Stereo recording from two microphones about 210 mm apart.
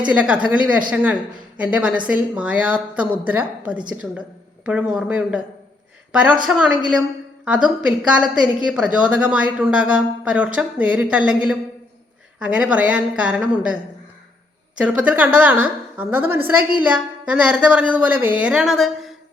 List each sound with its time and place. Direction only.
0.0 s a woman's voice: 5° right (ahead or behind)
14.8 s a woman's voice: 5° right (ahead or behind)